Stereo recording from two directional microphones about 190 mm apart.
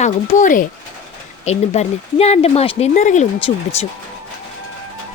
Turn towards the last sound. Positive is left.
turn(degrees=35)  # may be behind; listen again after turning